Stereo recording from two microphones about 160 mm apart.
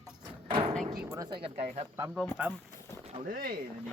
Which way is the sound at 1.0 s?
15° right (ahead or behind).